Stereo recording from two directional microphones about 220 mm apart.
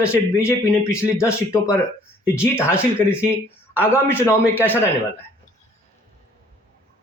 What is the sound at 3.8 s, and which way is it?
Speech, 10° left (ahead or behind).